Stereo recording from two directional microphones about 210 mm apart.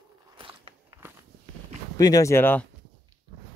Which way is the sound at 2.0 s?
15° left (ahead or behind).